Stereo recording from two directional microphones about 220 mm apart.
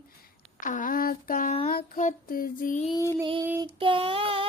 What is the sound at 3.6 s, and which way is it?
Child singing, 25° right (ahead or behind).